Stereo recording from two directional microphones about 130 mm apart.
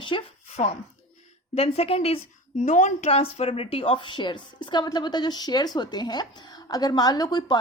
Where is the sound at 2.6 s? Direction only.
65° left (ahead or behind).